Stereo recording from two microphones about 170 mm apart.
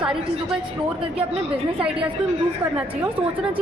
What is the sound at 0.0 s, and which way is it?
Speech, 5° right (ahead or behind).